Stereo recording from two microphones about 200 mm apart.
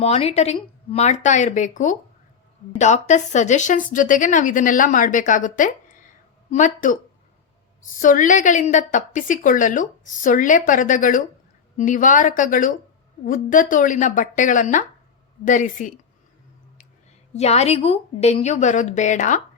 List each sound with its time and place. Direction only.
0.0 s speech: 30° left (ahead or behind)
8.0 s speech: 40° left (ahead or behind)
17.3 s speech: 30° left (ahead or behind)